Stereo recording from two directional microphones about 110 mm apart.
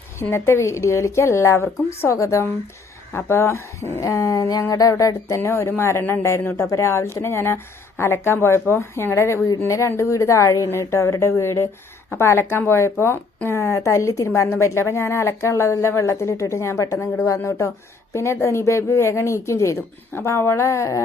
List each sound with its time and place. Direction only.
0.2 s speech: 20° left (ahead or behind)
4.1 s a sound: 35° left (ahead or behind)
4.7 s speech: 30° left (ahead or behind)